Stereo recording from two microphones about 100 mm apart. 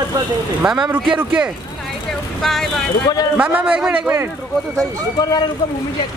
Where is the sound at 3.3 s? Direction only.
15° right (ahead or behind).